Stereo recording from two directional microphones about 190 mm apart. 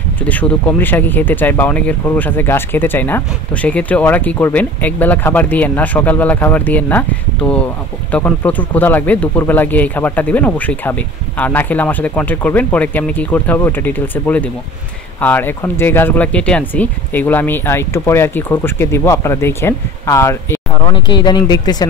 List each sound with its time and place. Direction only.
0.2 s speech: 5° left (ahead or behind)